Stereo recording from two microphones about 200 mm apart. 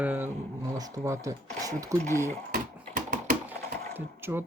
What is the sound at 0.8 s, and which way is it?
Speech, 15° right (ahead or behind).